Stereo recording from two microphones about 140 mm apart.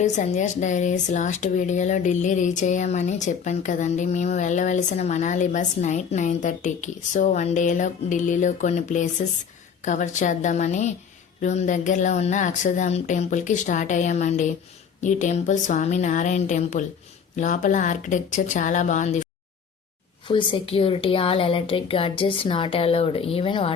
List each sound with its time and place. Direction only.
0.0 s speech: 60° left (ahead or behind)
20.2 s a woman's voice: 35° left (ahead or behind)